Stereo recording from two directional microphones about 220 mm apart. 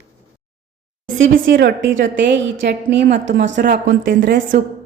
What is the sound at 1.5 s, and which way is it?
A woman's voice, 50° right (ahead or behind).